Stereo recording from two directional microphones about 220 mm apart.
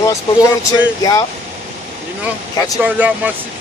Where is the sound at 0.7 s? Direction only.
15° left (ahead or behind).